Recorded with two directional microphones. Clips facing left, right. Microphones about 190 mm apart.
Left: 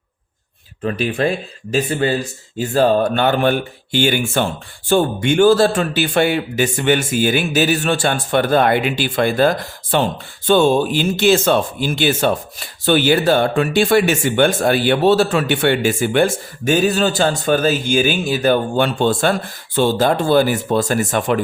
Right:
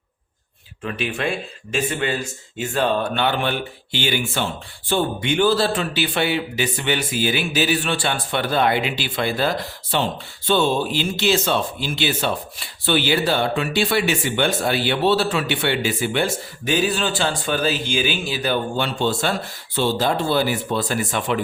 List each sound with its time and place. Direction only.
0.9 s speech: 40° left (ahead or behind)